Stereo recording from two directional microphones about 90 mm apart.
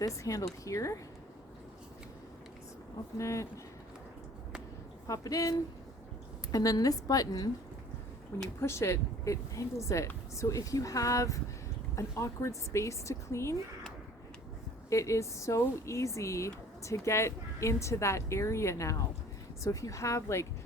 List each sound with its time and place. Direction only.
0.0 s speech: 40° left (ahead or behind)
3.2 s speech: 35° left (ahead or behind)
5.0 s a woman's voice: 40° left (ahead or behind)
8.6 s speech: 30° left (ahead or behind)
14.8 s speech: 35° left (ahead or behind)